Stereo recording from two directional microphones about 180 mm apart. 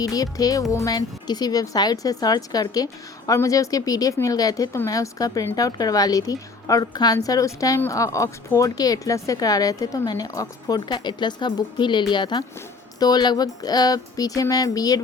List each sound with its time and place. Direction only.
0.0 s a woman's voice: 20° left (ahead or behind)